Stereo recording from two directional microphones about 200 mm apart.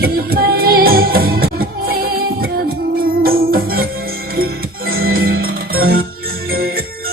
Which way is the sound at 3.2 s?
50° right (ahead or behind).